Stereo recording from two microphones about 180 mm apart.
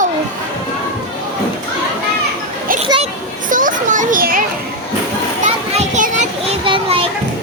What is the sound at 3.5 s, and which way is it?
Children playing, 45° right (ahead or behind).